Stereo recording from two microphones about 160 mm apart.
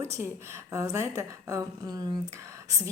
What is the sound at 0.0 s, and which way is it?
Speech, 15° right (ahead or behind).